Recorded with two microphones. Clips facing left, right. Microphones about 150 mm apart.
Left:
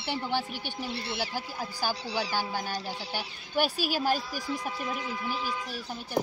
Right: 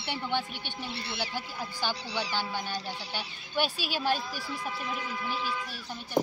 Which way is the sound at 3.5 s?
40° left (ahead or behind).